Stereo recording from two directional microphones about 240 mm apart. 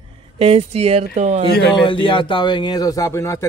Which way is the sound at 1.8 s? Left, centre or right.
Left.